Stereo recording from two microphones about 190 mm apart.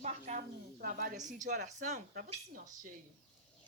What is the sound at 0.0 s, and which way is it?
Speech, 35° right (ahead or behind).